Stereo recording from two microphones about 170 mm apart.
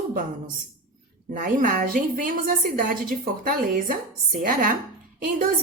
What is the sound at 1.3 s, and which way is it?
A woman's voice, 50° right (ahead or behind).